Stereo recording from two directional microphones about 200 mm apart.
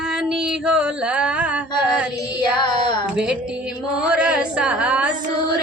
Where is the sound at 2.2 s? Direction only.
20° left (ahead or behind).